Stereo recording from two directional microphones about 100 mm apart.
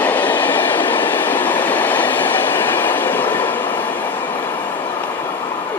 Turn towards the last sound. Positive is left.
turn(degrees=20)  # may be behind; listen again after turning